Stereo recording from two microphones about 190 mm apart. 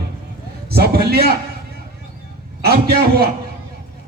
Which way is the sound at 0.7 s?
55° right (ahead or behind).